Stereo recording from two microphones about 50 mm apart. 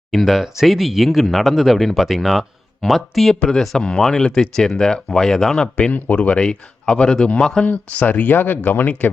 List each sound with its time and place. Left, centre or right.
0.1 s speech: centre
2.0 s speech: centre
5.9 s speech: left
7.6 s speech: left